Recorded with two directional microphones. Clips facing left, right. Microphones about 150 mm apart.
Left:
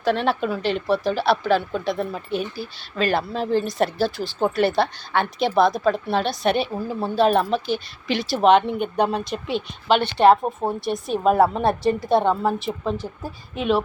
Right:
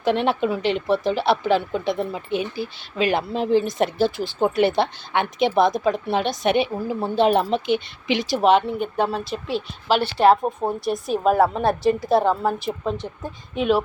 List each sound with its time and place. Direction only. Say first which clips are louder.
0.0 s speech: right 1 dB; 20° right (ahead or behind)
8.4 s a woman's voice: left 2 dB; centre (ahead or behind)